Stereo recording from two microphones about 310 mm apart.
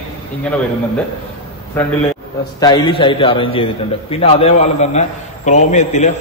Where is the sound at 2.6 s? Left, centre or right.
Centre.